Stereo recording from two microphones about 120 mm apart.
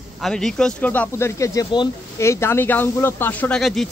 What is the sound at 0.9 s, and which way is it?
Speech, 20° left (ahead or behind).